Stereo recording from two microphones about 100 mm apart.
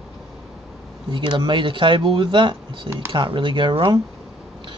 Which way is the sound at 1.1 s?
50° right (ahead or behind).